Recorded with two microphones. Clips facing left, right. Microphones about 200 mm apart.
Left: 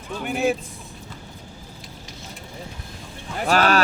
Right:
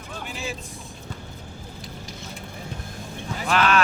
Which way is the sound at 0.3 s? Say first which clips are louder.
Left 13 dB; 60° left (ahead or behind).